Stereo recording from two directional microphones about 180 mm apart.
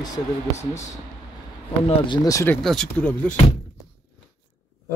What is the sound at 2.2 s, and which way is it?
Speech, 15° left (ahead or behind).